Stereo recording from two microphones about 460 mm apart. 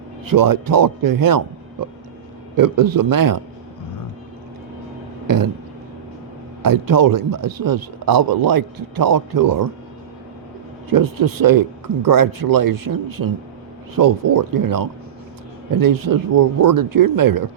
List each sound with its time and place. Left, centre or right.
0.3 s a man's voice: right
2.6 s a man's voice: right
6.6 s a man's voice: right
10.8 s a man's voice: right